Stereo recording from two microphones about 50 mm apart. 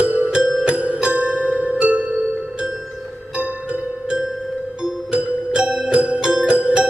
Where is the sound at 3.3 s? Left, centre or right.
Right.